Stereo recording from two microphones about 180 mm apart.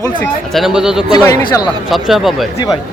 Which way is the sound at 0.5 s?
Centre (ahead or behind).